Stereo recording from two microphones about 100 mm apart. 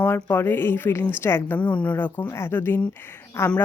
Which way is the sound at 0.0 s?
25° left (ahead or behind).